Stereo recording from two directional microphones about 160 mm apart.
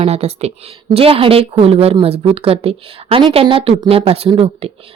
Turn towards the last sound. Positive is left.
turn(degrees=-35)  # may be behind; listen again after turning